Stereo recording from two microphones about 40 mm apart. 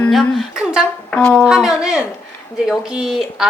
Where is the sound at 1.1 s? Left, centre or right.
Left.